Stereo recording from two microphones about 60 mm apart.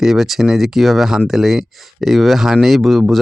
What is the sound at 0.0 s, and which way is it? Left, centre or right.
Speech, centre.